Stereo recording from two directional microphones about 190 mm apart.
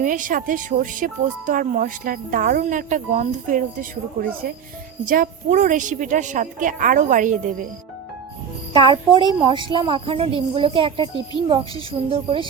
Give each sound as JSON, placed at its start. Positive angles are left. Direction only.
{"t": 0.0, "sound": "speech", "side_deg": -45}
{"t": 8.9, "sound": "a woman's voice", "side_deg": -25}